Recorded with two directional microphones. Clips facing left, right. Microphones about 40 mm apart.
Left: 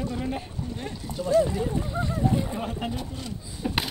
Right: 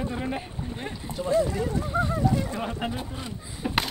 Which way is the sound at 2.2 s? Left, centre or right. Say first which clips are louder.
Left 4 dB; left.